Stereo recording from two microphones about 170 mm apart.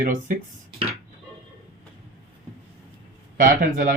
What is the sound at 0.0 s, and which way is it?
Speech, 55° right (ahead or behind).